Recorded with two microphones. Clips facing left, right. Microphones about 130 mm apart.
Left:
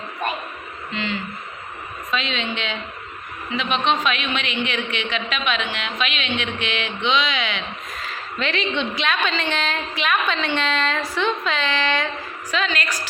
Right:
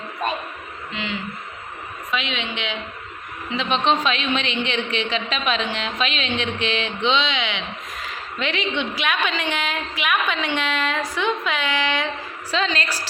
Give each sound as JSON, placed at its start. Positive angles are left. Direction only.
{"t": 0.9, "sound": "a woman's voice", "side_deg": -15}
{"t": 3.5, "sound": "a man's voice", "side_deg": -30}
{"t": 12.5, "sound": "a man's voice", "side_deg": -30}